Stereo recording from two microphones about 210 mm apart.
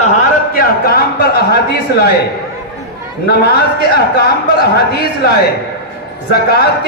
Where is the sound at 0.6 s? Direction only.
45° left (ahead or behind).